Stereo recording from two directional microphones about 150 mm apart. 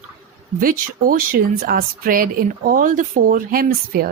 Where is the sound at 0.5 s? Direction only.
65° right (ahead or behind).